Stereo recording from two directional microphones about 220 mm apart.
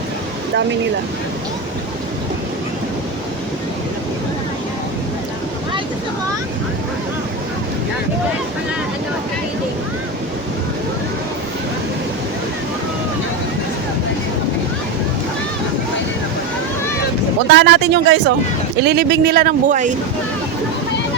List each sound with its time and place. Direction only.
17.5 s speech: 50° right (ahead or behind); by 19.9 s 35° right (ahead or behind)